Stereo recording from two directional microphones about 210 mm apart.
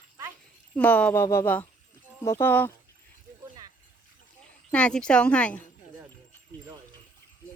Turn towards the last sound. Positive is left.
turn(degrees=5)  # may be behind; listen again after turning